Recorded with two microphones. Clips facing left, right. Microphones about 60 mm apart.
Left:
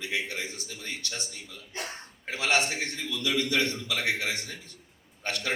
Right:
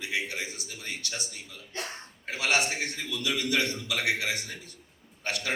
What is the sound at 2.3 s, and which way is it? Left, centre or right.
A man's voice, right.